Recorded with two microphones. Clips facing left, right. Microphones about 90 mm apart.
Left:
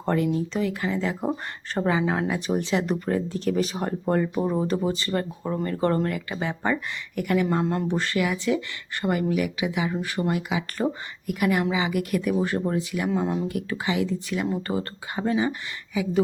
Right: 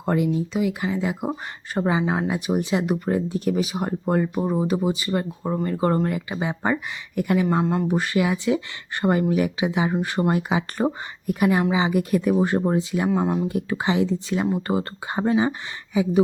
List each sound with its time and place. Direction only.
0.0 s speech: 10° right (ahead or behind)
7.6 s speech: 5° right (ahead or behind); by 13.1 s 25° right (ahead or behind)
13.1 s speech: 5° right (ahead or behind)
13.5 s speech: 25° right (ahead or behind)